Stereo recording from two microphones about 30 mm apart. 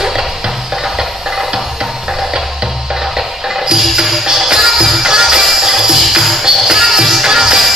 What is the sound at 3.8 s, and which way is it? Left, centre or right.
Music, centre.